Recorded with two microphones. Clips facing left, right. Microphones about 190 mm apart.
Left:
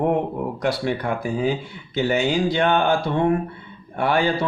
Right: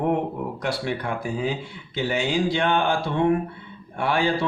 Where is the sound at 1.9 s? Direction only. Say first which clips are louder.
Left 4 dB; 45° left (ahead or behind).